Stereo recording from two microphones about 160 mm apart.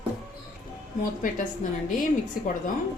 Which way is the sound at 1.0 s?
55° left (ahead or behind).